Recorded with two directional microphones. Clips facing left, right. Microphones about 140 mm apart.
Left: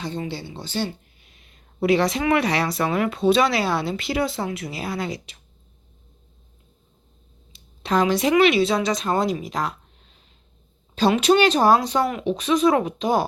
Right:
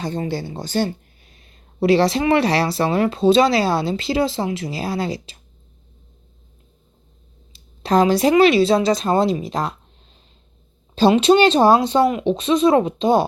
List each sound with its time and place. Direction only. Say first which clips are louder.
0.0 s speech: right 5 dB; 45° right (ahead or behind)
7.5 s speech: right 5 dB; 35° right (ahead or behind)